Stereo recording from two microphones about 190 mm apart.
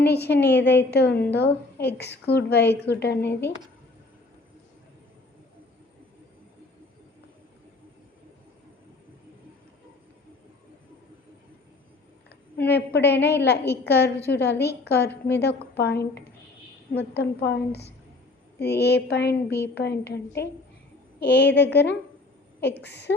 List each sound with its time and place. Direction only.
0.0 s a woman's voice: 60° left (ahead or behind)
12.6 s a woman's voice: 60° left (ahead or behind)